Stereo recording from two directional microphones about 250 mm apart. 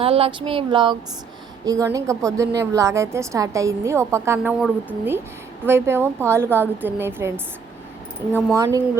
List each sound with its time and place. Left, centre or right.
0.0 s a sound: right
1.6 s a woman's voice: centre
8.5 s a woman's voice: centre